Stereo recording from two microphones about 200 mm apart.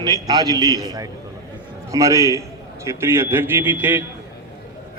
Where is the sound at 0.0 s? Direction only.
20° right (ahead or behind).